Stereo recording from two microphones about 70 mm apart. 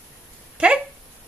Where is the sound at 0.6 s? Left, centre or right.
Centre.